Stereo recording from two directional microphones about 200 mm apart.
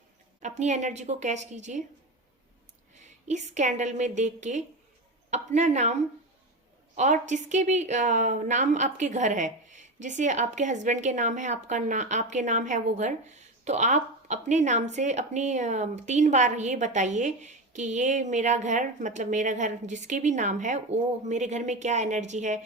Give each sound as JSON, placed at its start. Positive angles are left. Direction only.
{"t": 0.6, "sound": "a woman's voice", "side_deg": -35}
{"t": 3.0, "sound": "a woman's voice", "side_deg": -35}